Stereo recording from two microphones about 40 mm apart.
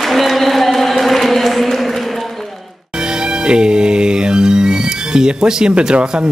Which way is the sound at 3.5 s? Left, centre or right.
Right.